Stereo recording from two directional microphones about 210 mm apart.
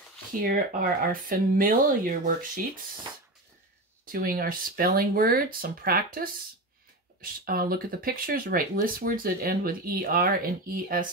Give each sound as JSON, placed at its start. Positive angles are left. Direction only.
{"t": 0.3, "sound": "speech", "side_deg": -45}
{"t": 4.0, "sound": "speech", "side_deg": -45}